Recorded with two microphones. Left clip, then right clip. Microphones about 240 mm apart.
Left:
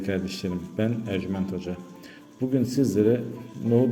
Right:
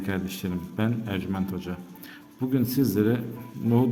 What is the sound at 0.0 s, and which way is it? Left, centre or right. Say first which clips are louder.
A man's voice: left 2 dB; centre.